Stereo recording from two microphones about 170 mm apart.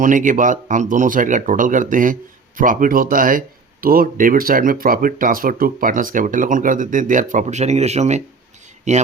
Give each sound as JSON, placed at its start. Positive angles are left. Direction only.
{"t": 0.0, "sound": "speech", "side_deg": -50}